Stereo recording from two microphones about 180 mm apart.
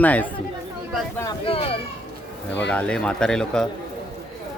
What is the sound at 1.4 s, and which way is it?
Speech, 30° left (ahead or behind).